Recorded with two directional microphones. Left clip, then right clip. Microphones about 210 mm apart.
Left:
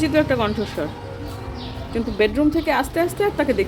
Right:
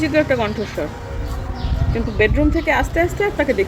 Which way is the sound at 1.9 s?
15° left (ahead or behind).